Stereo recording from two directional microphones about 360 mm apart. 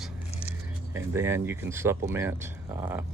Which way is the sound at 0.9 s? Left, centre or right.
Centre.